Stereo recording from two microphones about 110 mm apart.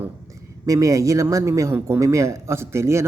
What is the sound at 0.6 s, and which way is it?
Speech, 30° right (ahead or behind).